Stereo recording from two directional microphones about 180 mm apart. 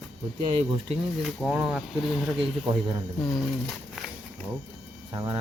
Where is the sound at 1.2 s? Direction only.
5° right (ahead or behind).